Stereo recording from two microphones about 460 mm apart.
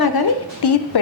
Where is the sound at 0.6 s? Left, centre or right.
Left.